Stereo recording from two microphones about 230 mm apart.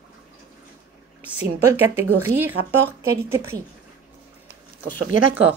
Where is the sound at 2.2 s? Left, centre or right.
Centre.